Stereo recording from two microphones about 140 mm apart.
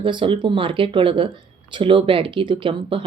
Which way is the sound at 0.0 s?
35° right (ahead or behind).